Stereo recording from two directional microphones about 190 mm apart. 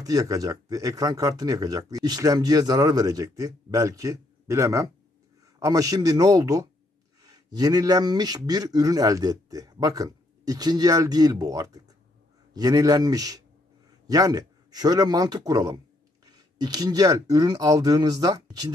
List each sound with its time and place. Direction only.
0.0 s speech: 20° right (ahead or behind)